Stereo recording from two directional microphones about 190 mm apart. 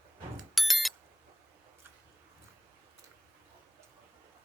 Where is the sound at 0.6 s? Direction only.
Centre (ahead or behind).